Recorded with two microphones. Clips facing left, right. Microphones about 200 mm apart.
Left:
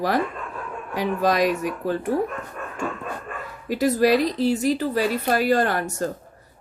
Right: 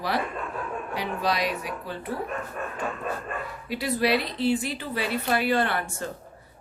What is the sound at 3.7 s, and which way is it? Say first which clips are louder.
A woman's voice: left 6 dB; 45° left (ahead or behind).